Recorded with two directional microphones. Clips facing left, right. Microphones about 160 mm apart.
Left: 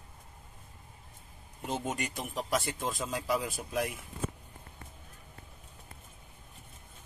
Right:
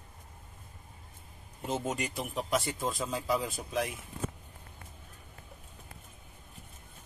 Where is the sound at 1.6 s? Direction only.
Centre (ahead or behind).